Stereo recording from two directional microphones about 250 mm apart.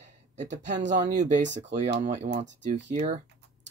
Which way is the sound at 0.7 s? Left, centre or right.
Right.